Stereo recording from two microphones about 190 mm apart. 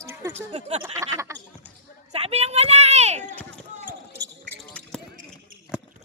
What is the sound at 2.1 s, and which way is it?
Speech, 35° right (ahead or behind).